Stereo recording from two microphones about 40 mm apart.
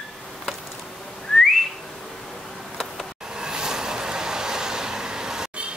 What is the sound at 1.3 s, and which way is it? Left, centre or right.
Whistling, centre.